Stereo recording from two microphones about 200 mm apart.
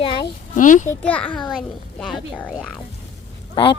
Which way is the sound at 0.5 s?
40° left (ahead or behind).